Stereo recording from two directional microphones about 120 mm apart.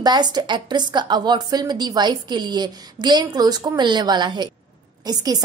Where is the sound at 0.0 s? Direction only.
35° right (ahead or behind).